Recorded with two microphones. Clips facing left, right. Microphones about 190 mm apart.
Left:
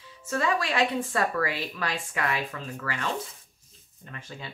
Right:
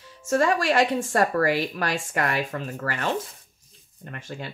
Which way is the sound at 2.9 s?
60° right (ahead or behind).